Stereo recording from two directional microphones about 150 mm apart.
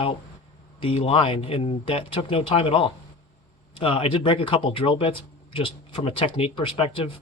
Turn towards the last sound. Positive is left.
turn(degrees=35)  # may be behind; listen again after turning